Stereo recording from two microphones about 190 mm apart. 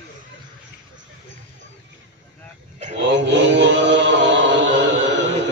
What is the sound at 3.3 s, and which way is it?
Music, 70° right (ahead or behind).